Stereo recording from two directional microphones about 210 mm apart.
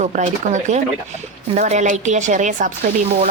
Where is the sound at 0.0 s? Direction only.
35° right (ahead or behind).